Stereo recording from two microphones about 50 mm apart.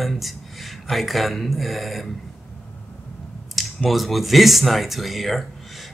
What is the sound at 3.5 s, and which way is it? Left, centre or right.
Speech, centre.